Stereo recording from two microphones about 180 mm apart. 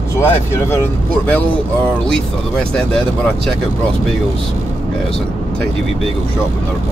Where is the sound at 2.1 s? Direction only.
5° left (ahead or behind).